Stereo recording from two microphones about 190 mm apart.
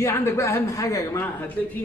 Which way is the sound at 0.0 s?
15° left (ahead or behind).